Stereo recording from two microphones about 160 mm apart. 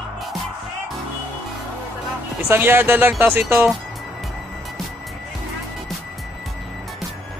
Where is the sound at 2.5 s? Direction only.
15° right (ahead or behind).